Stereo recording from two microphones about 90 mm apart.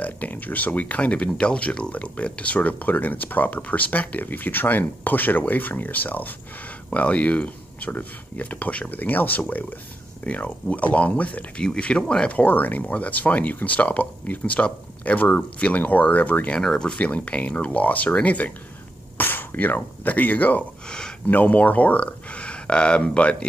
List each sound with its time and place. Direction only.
0.0 s speech: 20° left (ahead or behind)